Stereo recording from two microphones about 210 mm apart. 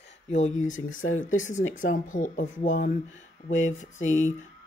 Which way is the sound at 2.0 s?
35° left (ahead or behind).